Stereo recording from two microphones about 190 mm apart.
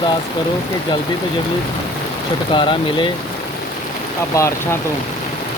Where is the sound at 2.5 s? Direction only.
25° left (ahead or behind).